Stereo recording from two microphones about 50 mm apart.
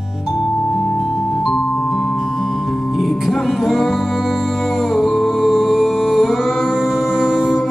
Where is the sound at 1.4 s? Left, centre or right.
Centre.